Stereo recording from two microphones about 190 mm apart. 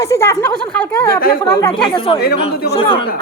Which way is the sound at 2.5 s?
55° left (ahead or behind).